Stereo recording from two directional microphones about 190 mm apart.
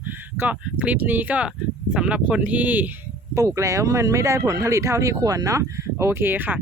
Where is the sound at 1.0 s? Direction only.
10° right (ahead or behind).